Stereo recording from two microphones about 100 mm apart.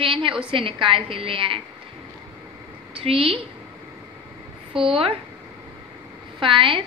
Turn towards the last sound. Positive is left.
turn(degrees=-60)  # may be behind; listen again after turning